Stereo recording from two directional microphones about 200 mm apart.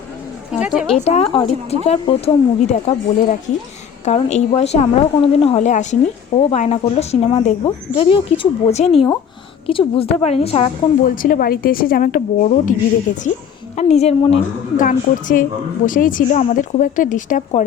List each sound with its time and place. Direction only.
0.6 s speech: 5° right (ahead or behind)
0.9 s a woman's voice: 35° left (ahead or behind)
4.0 s a woman's voice: 35° left (ahead or behind)
11.1 s a woman's voice: 45° left (ahead or behind)
13.7 s a woman's voice: 35° left (ahead or behind)
14.8 s a woman's voice: 45° left (ahead or behind)